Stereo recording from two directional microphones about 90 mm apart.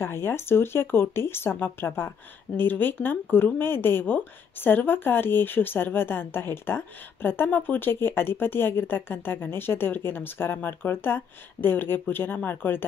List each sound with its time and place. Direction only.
0.0 s speech: 25° left (ahead or behind)